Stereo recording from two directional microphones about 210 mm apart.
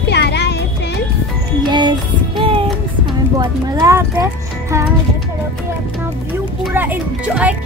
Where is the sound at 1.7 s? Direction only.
20° right (ahead or behind).